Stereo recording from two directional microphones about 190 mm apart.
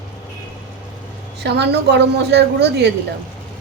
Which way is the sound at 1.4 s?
60° right (ahead or behind).